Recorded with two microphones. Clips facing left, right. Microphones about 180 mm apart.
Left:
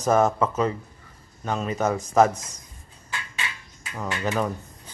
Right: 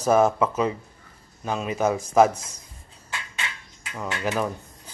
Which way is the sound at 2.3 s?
30° right (ahead or behind).